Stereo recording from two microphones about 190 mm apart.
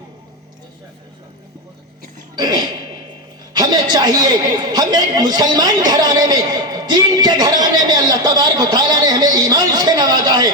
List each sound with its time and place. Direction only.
2.3 s a man's voice: 20° right (ahead or behind)